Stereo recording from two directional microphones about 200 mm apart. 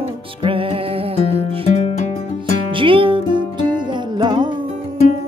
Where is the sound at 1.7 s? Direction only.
30° left (ahead or behind).